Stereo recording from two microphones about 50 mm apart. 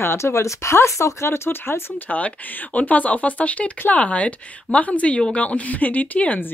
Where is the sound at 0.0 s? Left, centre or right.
Left.